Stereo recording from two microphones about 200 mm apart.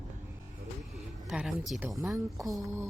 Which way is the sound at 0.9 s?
Centre (ahead or behind).